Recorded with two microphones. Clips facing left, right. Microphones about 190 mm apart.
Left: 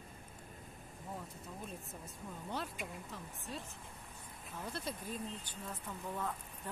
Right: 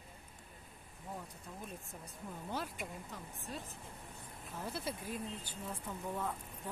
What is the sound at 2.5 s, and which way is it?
Speech, centre (ahead or behind).